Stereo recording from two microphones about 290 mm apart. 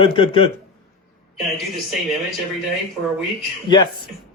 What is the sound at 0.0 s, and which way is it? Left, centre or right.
Speech, centre.